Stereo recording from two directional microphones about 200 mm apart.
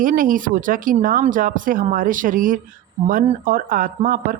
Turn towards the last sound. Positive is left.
turn(degrees=-45)  # may be behind; listen again after turning